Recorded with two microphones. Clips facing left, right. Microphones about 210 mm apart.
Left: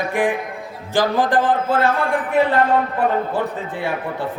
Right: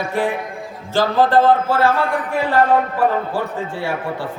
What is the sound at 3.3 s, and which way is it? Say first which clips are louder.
Speech: even; 20° left (ahead or behind).